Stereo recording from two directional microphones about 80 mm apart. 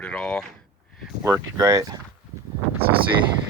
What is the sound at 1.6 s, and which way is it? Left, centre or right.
Speech, right.